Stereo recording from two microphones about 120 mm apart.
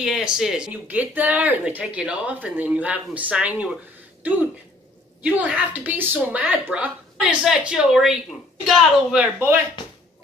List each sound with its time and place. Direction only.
0.0 s a woman's voice: 5° right (ahead or behind)
5.2 s a woman's voice: 15° right (ahead or behind)
9.8 s a sound: 35° left (ahead or behind)